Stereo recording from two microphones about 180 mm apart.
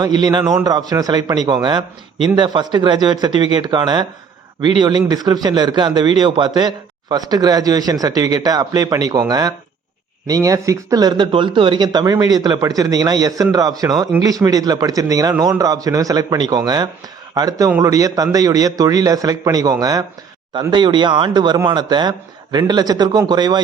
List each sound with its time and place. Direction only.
0.0 s a man's voice: 20° right (ahead or behind)